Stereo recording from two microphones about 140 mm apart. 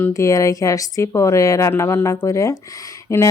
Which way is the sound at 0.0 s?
20° left (ahead or behind).